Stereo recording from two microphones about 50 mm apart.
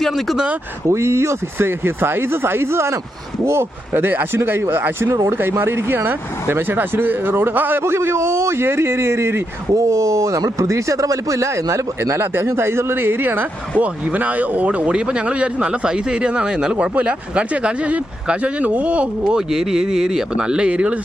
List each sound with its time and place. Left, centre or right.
0.1 s speech: centre
0.9 s speech: right
5.0 s speech: right
5.4 s speech: right
12.2 s speech: right
13.7 s speech: right; by 16.7 s centre
16.7 s speech: right
19.4 s speech: centre